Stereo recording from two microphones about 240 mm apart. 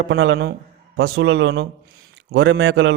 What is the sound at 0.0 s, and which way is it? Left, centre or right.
Speech, right.